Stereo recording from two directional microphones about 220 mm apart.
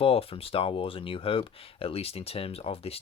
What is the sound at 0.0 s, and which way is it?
Speech, 25° left (ahead or behind).